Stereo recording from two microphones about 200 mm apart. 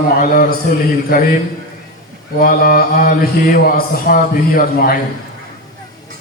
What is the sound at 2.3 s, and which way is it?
A man's voice, 45° left (ahead or behind).